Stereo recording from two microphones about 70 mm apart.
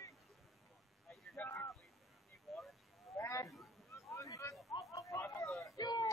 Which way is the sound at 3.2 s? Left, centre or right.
Left.